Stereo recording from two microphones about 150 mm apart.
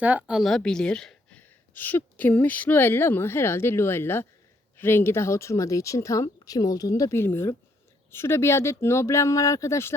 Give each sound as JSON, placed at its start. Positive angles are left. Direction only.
{"t": 0.0, "sound": "a woman's voice", "side_deg": -10}